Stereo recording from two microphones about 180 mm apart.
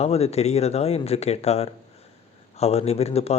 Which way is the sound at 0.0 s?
35° left (ahead or behind).